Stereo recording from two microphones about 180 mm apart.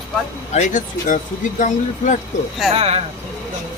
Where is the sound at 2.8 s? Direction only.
35° right (ahead or behind).